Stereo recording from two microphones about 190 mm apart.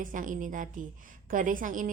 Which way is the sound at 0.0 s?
45° right (ahead or behind).